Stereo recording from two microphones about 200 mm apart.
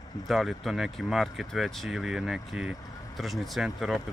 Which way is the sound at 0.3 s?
Centre (ahead or behind).